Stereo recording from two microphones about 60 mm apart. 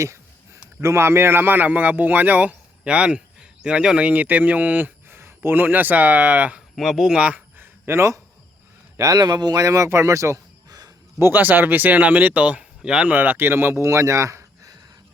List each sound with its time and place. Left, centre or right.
0.8 s a man's voice: right; by 4.1 s centre
4.1 s speech: right
6.7 s speech: centre
7.2 s speech: right
7.6 s a sound: right
9.6 s a man's voice: right
11.2 s speech: right; by 13.1 s centre
13.1 s speech: right
13.8 s a sound: right